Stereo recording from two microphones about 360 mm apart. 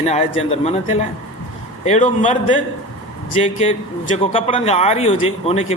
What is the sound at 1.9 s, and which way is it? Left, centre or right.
A man's voice, centre.